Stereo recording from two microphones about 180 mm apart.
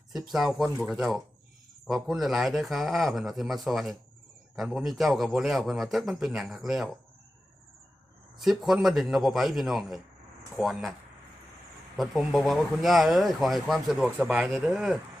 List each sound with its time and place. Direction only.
0.1 s speech: centre (ahead or behind)
8.4 s speech: centre (ahead or behind)
11.9 s speech: centre (ahead or behind)